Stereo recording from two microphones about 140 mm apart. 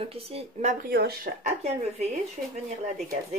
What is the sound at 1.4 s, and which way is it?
Speech, 55° right (ahead or behind).